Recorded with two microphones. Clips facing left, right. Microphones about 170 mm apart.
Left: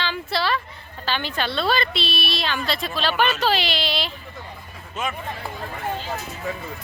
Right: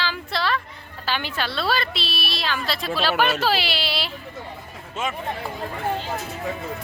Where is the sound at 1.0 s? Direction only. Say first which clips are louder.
Left 1 dB; 10° right (ahead or behind).